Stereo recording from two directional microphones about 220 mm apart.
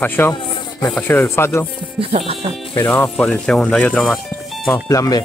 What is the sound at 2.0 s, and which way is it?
Speech, 30° right (ahead or behind).